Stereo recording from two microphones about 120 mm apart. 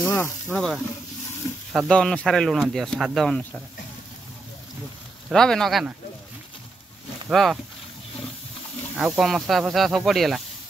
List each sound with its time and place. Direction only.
0.0 s speech: 15° left (ahead or behind)
1.7 s speech: 5° left (ahead or behind)
5.3 s speech: 5° left (ahead or behind)
7.2 s speech: centre (ahead or behind)
8.9 s speech: centre (ahead or behind)